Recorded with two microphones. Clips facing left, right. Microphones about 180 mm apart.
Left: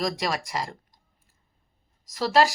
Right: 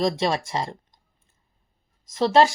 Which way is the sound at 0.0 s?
25° right (ahead or behind).